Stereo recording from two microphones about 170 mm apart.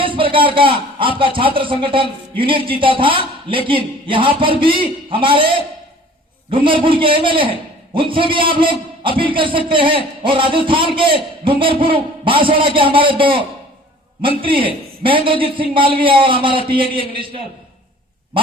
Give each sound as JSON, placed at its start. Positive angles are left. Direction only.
{"t": 0.0, "sound": "a man's voice", "side_deg": -30}